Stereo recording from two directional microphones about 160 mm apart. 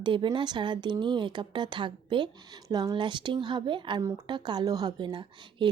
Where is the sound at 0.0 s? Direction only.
30° right (ahead or behind).